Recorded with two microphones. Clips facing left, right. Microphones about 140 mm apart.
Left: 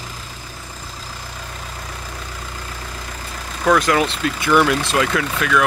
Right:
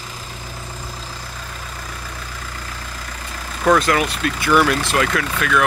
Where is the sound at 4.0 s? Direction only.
25° left (ahead or behind).